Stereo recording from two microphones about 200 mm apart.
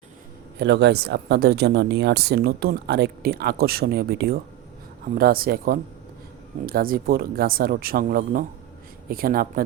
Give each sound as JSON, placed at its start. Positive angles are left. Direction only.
{"t": 0.6, "sound": "speech", "side_deg": -55}